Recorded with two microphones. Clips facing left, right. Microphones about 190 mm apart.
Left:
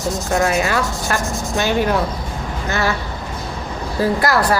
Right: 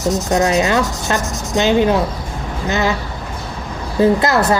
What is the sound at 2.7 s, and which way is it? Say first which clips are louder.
Speech: right 3 dB; 20° right (ahead or behind).